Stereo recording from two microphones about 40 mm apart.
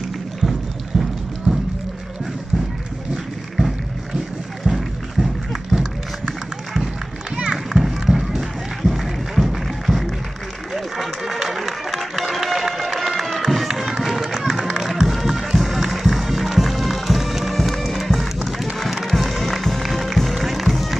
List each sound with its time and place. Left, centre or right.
0.4 s a sound: centre
1.5 s run: centre
4.6 s music: centre
7.5 s children playing: centre
8.2 s music: centre
10.7 s run: centre
13.4 s music: centre